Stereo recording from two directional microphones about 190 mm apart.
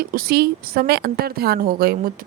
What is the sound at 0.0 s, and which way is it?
A woman's voice, 50° right (ahead or behind).